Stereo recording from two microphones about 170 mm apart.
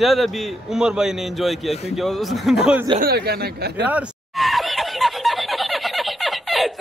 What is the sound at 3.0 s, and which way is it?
Speech, 70° right (ahead or behind).